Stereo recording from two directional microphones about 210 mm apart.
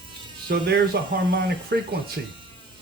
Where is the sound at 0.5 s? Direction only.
50° right (ahead or behind).